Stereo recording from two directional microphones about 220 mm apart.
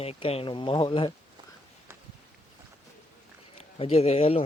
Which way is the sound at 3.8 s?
25° left (ahead or behind).